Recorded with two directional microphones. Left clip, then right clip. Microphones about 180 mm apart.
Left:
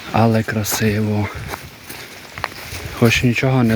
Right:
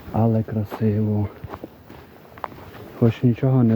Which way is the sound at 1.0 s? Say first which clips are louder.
Left 5 dB; 25° left (ahead or behind).